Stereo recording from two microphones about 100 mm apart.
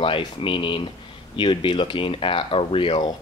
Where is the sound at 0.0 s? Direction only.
60° left (ahead or behind).